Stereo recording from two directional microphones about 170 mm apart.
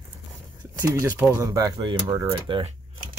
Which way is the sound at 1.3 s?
20° right (ahead or behind).